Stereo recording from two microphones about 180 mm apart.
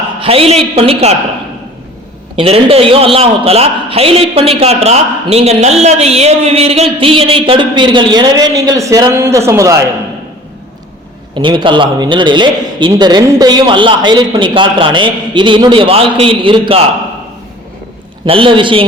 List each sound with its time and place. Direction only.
0.2 s a man's voice: 30° right (ahead or behind)
2.3 s a man's voice: 30° right (ahead or behind)
11.3 s a man's voice: 25° right (ahead or behind)
18.3 s a man's voice: 30° right (ahead or behind)